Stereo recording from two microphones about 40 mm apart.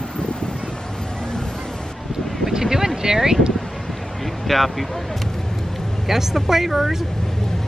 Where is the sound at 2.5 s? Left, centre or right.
Centre.